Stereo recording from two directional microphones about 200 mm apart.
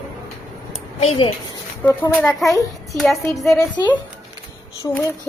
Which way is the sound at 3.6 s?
20° left (ahead or behind).